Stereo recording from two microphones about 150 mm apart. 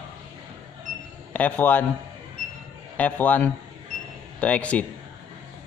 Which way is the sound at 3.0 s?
10° left (ahead or behind).